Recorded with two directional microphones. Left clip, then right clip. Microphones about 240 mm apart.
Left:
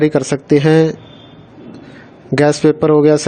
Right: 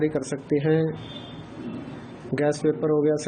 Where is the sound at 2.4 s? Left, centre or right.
Left.